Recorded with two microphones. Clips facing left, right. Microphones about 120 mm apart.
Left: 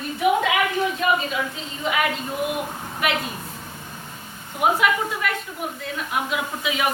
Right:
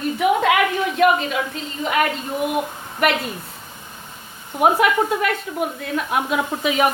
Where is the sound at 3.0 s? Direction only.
60° right (ahead or behind).